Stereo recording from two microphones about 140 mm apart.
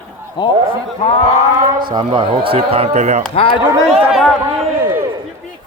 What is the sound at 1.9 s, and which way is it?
Speech, 35° right (ahead or behind).